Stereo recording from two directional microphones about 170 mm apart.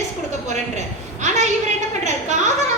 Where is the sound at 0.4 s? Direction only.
45° right (ahead or behind).